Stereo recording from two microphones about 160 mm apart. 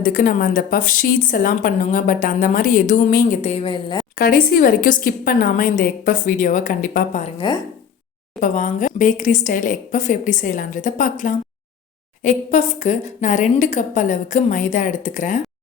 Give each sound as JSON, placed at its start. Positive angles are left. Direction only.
{"t": 0.0, "sound": "a woman's voice", "side_deg": 60}
{"t": 3.7, "sound": "a woman's voice", "side_deg": 30}
{"t": 4.1, "sound": "a woman's voice", "side_deg": 65}
{"t": 7.3, "sound": "a woman's voice", "side_deg": 30}
{"t": 8.4, "sound": "a woman's voice", "side_deg": 55}